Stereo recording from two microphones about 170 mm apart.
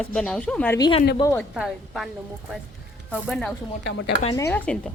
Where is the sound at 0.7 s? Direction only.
25° left (ahead or behind).